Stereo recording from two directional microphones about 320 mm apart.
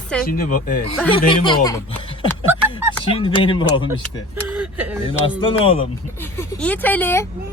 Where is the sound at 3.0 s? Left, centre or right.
Centre.